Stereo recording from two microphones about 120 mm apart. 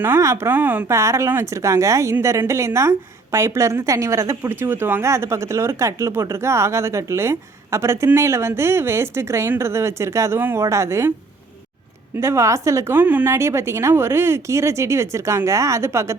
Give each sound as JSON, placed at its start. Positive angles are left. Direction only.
{"t": 0.0, "sound": "speech", "side_deg": -20}
{"t": 12.1, "sound": "speech", "side_deg": -25}